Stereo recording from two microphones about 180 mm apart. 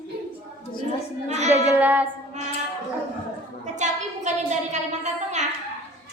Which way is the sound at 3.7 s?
40° right (ahead or behind).